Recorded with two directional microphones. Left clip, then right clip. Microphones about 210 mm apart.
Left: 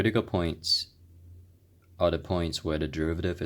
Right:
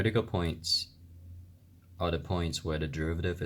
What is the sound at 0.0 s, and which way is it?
Speech, 35° left (ahead or behind).